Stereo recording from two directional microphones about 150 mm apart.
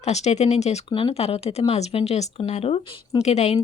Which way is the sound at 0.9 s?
35° left (ahead or behind).